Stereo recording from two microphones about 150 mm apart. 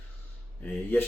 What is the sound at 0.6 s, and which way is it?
Speech, 10° left (ahead or behind).